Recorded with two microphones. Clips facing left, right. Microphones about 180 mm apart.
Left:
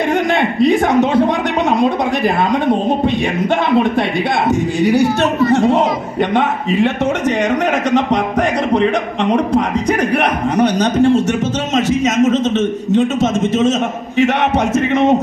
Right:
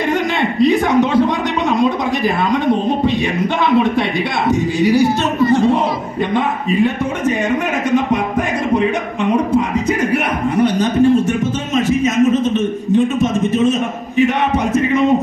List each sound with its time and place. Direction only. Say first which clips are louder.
0.6 s a sound: even; 55° left (ahead or behind)
4.8 s speech: even; 55° left (ahead or behind)
6.3 s a man's voice: even; 80° left
7.9 s music: left 1 dB; 85° left
9.3 s a sound: even; 80° left
14.2 s speech: left 1 dB; 85° left